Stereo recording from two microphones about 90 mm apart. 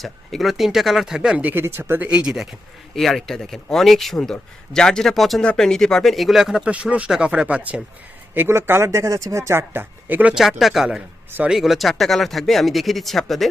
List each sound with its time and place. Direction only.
0.0 s speech: centre (ahead or behind); by 7.8 s 15° right (ahead or behind)
8.4 s speech: 25° right (ahead or behind)
10.3 s speech: centre (ahead or behind)